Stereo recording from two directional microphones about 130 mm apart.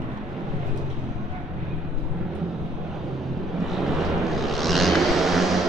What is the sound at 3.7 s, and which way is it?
Vehicle, centre (ahead or behind).